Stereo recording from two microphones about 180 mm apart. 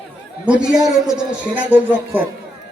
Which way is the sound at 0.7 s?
20° right (ahead or behind).